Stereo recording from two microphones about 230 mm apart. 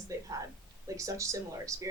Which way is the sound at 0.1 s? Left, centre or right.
Centre.